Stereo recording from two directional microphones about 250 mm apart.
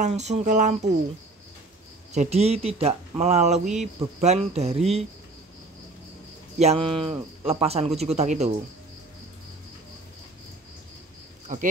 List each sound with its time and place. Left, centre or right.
0.0 s speech: right
2.1 s speech: right
3.6 s speech: centre
4.2 s speech: right
6.6 s speech: right
11.5 s speech: right